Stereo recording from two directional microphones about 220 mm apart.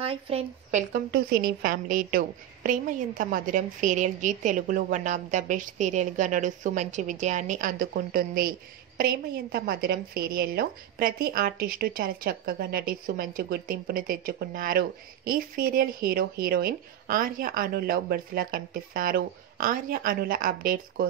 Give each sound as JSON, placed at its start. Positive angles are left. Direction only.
{"t": 0.0, "sound": "speech", "side_deg": -25}